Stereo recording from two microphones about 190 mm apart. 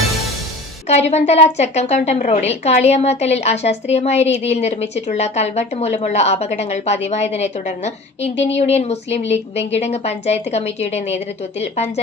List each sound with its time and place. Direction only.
0.9 s a woman's voice: 35° left (ahead or behind)